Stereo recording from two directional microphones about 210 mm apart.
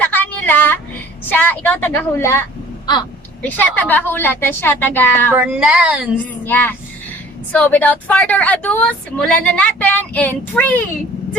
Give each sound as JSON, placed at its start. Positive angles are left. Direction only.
{"t": 0.0, "sound": "a sound", "side_deg": 10}
{"t": 1.2, "sound": "speech", "side_deg": 10}
{"t": 3.4, "sound": "speech", "side_deg": 10}
{"t": 5.3, "sound": "a woman's voice", "side_deg": -5}
{"t": 6.4, "sound": "speech", "side_deg": 10}